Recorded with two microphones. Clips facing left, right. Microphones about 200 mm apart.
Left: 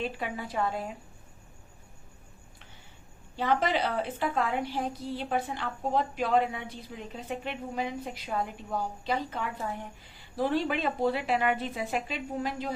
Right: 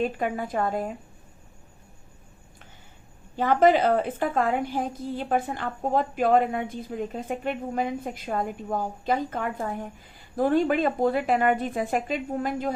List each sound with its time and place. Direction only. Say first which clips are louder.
0.0 s a woman's voice: right 7 dB; 50° right (ahead or behind)
3.3 s a woman's voice: right 8 dB; 50° right (ahead or behind)